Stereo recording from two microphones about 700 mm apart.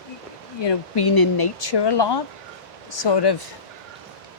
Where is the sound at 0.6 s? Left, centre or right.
Left.